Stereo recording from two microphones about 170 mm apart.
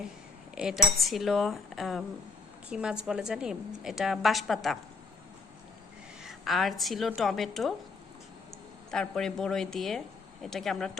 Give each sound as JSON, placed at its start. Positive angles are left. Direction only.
{"t": 0.5, "sound": "a woman's voice", "side_deg": -5}
{"t": 6.2, "sound": "a woman's voice", "side_deg": 0}
{"t": 8.9, "sound": "a woman's voice", "side_deg": 5}